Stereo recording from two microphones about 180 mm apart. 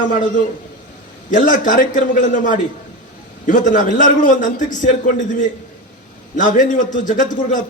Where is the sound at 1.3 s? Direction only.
45° left (ahead or behind).